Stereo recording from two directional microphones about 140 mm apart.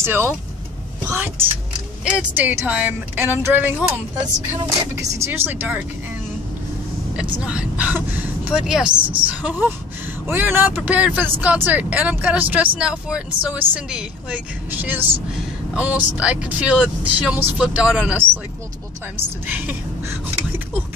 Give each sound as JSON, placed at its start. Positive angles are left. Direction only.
{"t": 0.0, "sound": "speech", "side_deg": -15}
{"t": 1.0, "sound": "vehicle", "side_deg": -15}
{"t": 2.1, "sound": "speech", "side_deg": -15}
{"t": 7.4, "sound": "speech", "side_deg": -10}
{"t": 19.4, "sound": "speech", "side_deg": -10}